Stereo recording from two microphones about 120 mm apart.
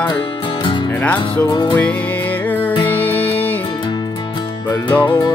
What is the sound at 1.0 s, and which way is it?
Music, 10° left (ahead or behind).